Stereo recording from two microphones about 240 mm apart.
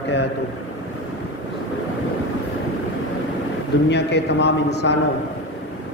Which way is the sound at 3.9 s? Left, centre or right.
Left.